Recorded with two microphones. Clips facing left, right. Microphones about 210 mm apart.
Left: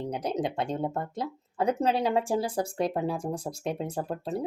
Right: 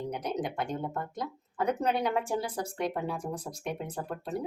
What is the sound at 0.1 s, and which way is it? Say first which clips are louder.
A woman's voice: left 3 dB; 30° left (ahead or behind).